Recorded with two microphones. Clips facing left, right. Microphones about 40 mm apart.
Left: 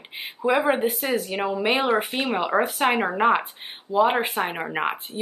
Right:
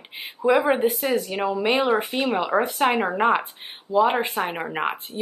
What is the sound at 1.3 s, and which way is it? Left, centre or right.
Speech, centre.